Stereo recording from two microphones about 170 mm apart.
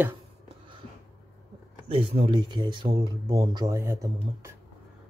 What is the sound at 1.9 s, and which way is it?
Speech, 35° right (ahead or behind).